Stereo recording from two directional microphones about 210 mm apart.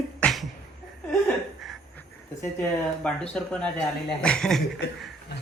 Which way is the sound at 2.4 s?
5° left (ahead or behind).